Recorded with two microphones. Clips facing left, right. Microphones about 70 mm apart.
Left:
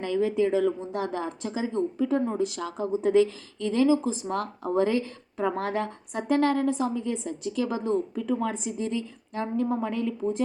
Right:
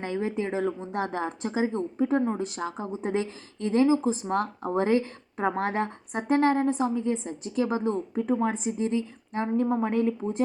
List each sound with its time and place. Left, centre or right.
0.0 s speech: right